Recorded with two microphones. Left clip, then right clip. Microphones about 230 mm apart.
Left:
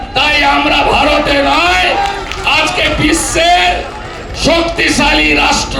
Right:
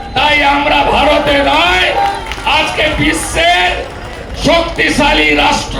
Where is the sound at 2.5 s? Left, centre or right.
Left.